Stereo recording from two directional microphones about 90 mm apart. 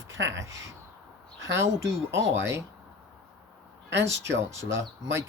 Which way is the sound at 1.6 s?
30° right (ahead or behind).